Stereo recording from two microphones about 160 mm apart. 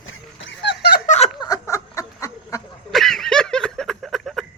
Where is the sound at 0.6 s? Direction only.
90° left.